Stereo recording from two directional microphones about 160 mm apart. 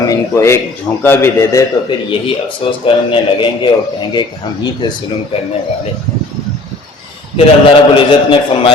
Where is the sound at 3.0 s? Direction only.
30° left (ahead or behind).